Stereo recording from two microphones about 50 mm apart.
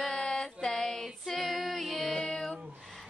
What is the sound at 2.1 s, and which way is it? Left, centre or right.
Child singing, centre.